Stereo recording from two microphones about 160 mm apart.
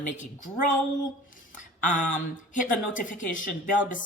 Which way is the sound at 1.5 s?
55° left (ahead or behind).